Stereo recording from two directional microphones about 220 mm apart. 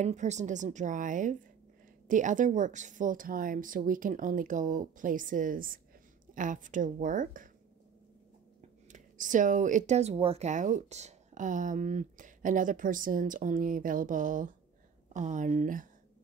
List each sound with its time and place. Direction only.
0.0 s speech: 30° right (ahead or behind)
8.9 s speech: 35° right (ahead or behind)